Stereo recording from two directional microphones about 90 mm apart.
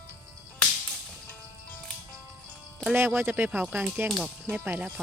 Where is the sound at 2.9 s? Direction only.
25° right (ahead or behind).